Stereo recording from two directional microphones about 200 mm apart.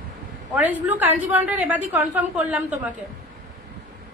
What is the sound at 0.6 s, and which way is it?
A woman's voice, 10° right (ahead or behind).